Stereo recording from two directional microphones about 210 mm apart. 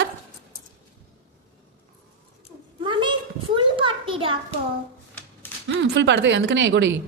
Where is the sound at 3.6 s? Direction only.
25° right (ahead or behind).